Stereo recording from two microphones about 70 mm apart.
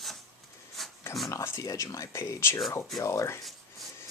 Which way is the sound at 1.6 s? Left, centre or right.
Left.